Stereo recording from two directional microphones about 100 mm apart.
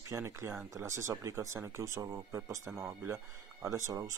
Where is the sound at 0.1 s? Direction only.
25° right (ahead or behind).